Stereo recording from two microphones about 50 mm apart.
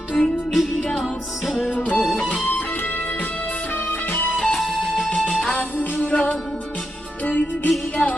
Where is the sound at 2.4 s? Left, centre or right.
Left.